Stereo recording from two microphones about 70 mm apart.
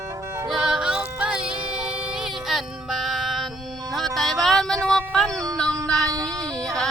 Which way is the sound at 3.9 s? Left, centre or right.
Centre.